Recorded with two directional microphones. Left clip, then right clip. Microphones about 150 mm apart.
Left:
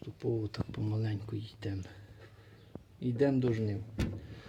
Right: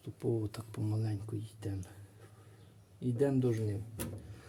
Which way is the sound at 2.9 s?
10° left (ahead or behind).